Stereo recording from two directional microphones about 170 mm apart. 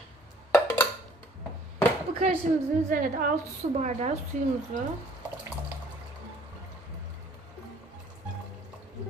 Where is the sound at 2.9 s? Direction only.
55° right (ahead or behind).